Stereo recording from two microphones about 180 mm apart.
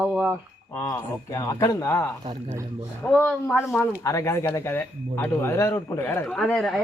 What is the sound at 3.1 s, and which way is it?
Speech, 5° left (ahead or behind).